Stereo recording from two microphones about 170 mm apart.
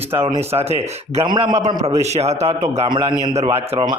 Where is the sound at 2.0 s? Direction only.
40° right (ahead or behind).